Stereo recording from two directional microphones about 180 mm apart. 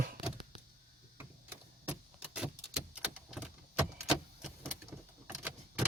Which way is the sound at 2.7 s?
5° right (ahead or behind).